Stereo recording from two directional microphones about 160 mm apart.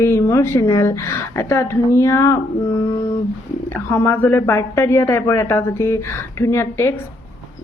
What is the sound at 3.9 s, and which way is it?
A woman's voice, 15° left (ahead or behind).